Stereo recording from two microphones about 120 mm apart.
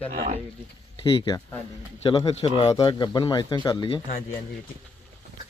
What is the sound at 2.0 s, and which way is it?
Speech, 40° left (ahead or behind).